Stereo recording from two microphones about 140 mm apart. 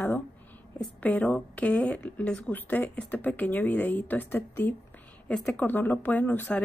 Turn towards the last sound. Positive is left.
turn(degrees=10)  # may be behind; listen again after turning